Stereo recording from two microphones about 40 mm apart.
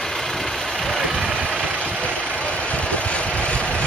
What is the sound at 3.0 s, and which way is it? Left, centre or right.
Vehicle, left.